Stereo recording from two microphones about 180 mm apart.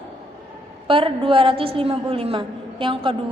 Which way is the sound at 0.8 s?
30° right (ahead or behind).